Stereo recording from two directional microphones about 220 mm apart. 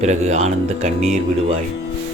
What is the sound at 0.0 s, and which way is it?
Speech, 30° right (ahead or behind).